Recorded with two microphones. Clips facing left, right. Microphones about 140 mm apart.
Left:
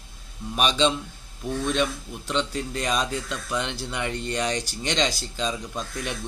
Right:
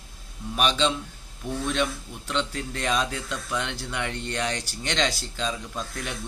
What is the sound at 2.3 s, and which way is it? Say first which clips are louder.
Speech: left 2 dB; 15° left (ahead or behind).